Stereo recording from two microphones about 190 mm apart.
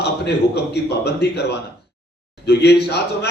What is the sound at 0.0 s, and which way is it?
A man's voice, 60° left (ahead or behind).